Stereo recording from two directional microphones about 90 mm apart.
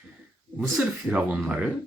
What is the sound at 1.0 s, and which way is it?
Speech, 15° right (ahead or behind).